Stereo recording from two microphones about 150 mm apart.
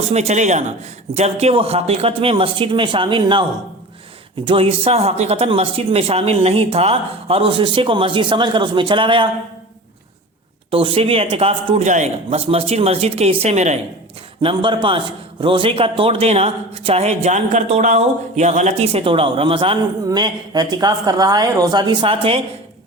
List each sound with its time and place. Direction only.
0.1 s a man's voice: 45° right (ahead or behind)
4.4 s a man's voice: 35° right (ahead or behind)
10.7 s a man's voice: 35° right (ahead or behind)
14.4 s a man's voice: 30° right (ahead or behind)